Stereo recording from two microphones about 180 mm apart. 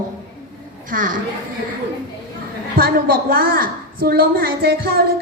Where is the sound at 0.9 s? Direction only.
50° right (ahead or behind).